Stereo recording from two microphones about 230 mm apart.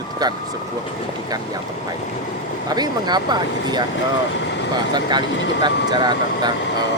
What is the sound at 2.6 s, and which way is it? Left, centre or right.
Speech, centre.